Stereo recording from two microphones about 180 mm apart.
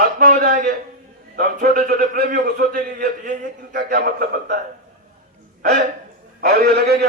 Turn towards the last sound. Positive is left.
turn(degrees=-60)  # may be behind; listen again after turning